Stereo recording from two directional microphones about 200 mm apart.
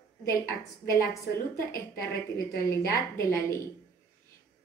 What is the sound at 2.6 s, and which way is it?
Speech, 15° left (ahead or behind).